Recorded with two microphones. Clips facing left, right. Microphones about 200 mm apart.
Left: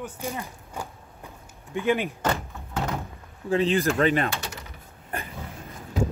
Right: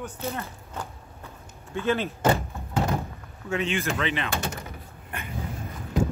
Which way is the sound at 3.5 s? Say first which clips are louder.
Left 5 dB; 35° left (ahead or behind).